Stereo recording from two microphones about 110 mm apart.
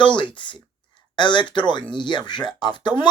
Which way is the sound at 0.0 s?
50° left (ahead or behind).